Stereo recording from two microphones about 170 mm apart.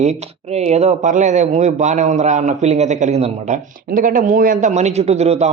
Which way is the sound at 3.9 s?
50° right (ahead or behind).